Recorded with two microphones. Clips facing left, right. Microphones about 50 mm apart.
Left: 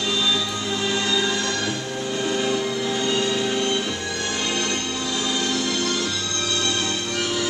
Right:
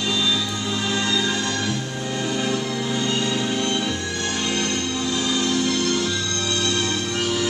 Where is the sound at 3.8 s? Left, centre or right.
Centre.